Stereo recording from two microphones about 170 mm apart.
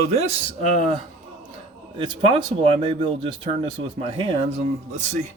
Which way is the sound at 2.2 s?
35° right (ahead or behind).